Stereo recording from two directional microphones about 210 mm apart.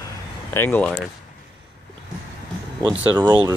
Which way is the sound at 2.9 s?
5° right (ahead or behind).